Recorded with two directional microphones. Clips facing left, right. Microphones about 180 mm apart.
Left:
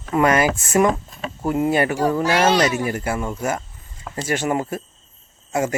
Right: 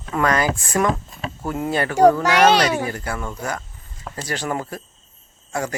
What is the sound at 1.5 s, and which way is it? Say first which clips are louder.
Speech: left 5 dB; 5° left (ahead or behind).